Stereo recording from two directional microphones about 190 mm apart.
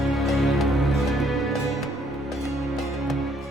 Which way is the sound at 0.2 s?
Centre (ahead or behind).